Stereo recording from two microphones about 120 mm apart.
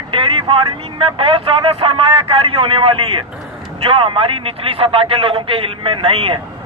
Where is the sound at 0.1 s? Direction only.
45° right (ahead or behind).